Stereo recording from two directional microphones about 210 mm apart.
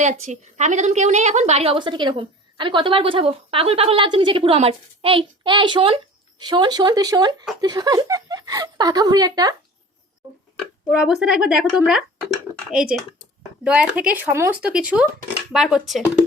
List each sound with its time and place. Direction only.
0.0 s speech: 35° right (ahead or behind); by 9.6 s 20° right (ahead or behind)
10.8 s speech: 5° right (ahead or behind)
13.7 s speech: 5° right (ahead or behind)